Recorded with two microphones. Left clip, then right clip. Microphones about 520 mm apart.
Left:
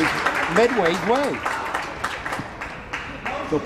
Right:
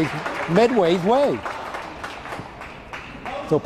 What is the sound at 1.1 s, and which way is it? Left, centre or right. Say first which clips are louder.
Speech: right 3 dB; right.